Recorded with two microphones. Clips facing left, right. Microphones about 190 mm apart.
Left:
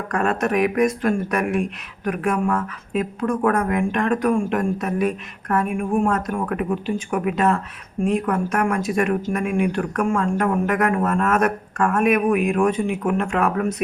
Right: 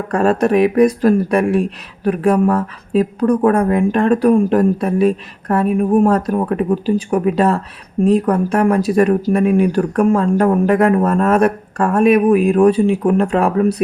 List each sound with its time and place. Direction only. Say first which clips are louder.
0.1 s speech: right 7 dB; 35° right (ahead or behind)